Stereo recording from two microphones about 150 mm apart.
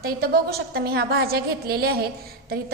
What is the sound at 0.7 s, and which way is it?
A woman's voice, 90° right.